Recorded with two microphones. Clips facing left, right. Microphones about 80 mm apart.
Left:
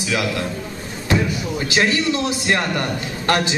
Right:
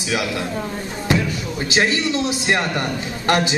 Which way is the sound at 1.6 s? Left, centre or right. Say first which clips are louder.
Even; right.